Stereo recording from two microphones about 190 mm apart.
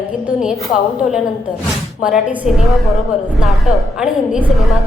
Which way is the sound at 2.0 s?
5° right (ahead or behind).